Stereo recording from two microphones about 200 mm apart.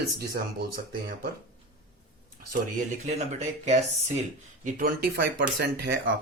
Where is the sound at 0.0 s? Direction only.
50° right (ahead or behind).